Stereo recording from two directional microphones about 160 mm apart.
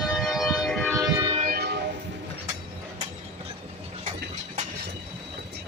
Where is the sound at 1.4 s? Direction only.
80° right.